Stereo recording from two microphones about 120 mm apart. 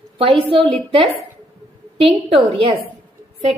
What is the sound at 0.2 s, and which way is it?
Speech, 50° right (ahead or behind).